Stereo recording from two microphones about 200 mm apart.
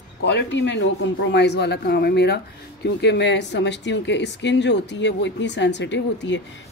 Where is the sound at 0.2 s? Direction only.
60° left (ahead or behind).